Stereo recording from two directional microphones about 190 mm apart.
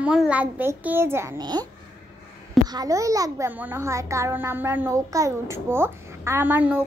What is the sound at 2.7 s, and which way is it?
A child's voice, 20° right (ahead or behind).